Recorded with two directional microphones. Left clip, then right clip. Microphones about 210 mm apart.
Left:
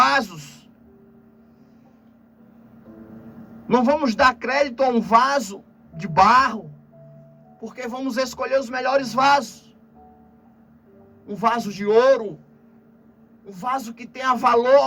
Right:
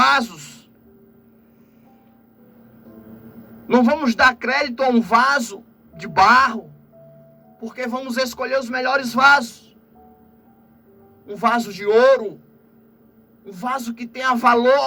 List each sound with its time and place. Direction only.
0.0 s a sound: 50° right (ahead or behind)
3.7 s a man's voice: 50° right (ahead or behind)
8.0 s a man's voice: 50° right (ahead or behind)
11.3 s a man's voice: 45° right (ahead or behind)
13.5 s a man's voice: 45° right (ahead or behind)